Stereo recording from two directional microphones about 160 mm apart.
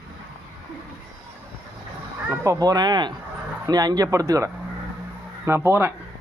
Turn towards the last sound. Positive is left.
turn(degrees=-15)  # may be behind; listen again after turning